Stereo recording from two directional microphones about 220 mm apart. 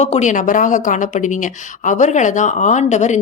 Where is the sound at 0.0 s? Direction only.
30° left (ahead or behind).